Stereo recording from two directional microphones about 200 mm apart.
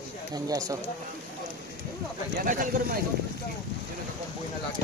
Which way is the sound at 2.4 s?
45° right (ahead or behind).